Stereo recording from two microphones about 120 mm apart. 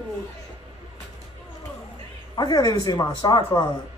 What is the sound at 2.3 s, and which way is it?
Speech, 35° left (ahead or behind).